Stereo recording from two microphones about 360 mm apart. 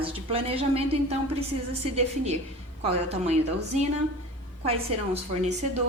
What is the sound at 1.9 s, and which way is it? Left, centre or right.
A woman's voice, centre.